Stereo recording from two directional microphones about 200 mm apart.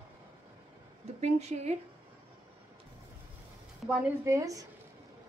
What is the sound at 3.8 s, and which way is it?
Speech, 10° right (ahead or behind).